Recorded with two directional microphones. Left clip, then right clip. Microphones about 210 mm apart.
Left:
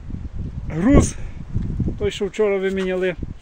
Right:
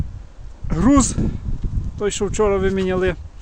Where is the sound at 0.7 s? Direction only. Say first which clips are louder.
Right 1 dB; 5° right (ahead or behind).